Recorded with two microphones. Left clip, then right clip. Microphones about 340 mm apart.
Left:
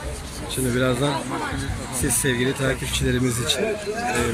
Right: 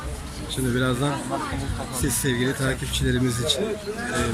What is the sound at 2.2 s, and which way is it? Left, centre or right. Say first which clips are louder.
Speech: left 3 dB; centre.